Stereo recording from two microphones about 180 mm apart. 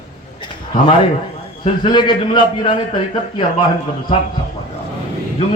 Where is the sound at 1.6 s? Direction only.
25° left (ahead or behind).